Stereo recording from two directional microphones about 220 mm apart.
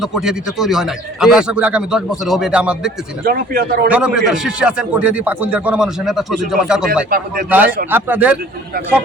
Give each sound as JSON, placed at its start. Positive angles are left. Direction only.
{"t": 0.0, "sound": "a man's voice", "side_deg": 0}
{"t": 3.2, "sound": "speech", "side_deg": -45}
{"t": 3.8, "sound": "a man's voice", "side_deg": -5}